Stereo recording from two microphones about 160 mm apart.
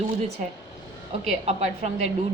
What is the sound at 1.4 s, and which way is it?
Speech, 40° right (ahead or behind).